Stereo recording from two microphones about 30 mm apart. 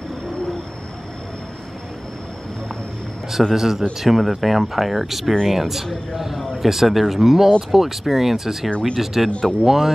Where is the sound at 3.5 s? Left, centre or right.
Centre.